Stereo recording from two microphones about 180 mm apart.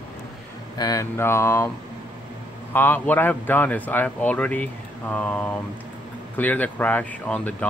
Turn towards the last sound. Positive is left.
turn(degrees=10)  # may be behind; listen again after turning